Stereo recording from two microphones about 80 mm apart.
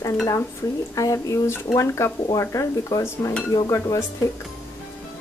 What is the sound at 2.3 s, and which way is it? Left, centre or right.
Speech, left.